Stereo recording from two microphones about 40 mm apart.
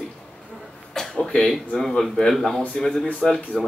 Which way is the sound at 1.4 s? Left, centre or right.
Centre.